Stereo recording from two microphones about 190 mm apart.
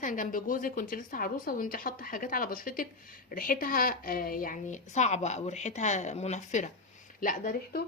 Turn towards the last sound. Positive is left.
turn(degrees=50)  # may be behind; listen again after turning